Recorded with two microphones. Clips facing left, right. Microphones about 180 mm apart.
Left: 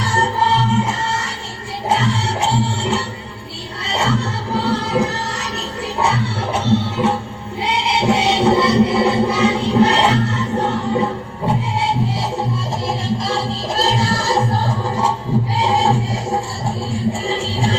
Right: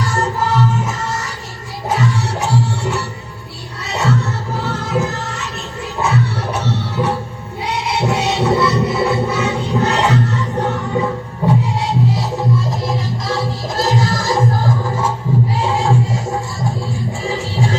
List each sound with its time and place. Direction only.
0.0 s music: 30° left (ahead or behind)
4.5 s choir: 30° left (ahead or behind)
6.0 s music: 30° left (ahead or behind)
11.9 s music: 30° left (ahead or behind)